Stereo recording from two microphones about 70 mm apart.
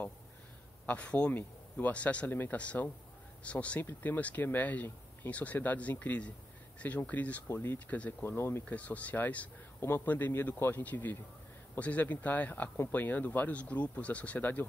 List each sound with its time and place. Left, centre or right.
0.8 s speech: centre
8.3 s speech: left
8.6 s speech: left
9.8 s a man's voice: left